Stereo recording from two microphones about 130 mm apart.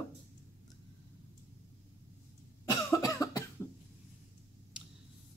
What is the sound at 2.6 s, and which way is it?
Cough, 25° left (ahead or behind).